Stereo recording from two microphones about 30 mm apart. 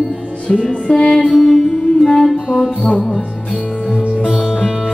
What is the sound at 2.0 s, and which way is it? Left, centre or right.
Music, centre.